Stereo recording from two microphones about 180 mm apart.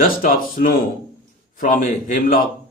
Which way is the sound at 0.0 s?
50° left (ahead or behind).